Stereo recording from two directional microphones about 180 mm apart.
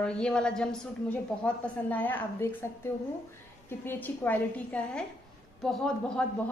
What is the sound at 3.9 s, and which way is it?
A woman's voice, 10° left (ahead or behind).